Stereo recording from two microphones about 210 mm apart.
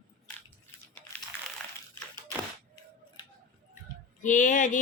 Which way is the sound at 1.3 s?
10° left (ahead or behind).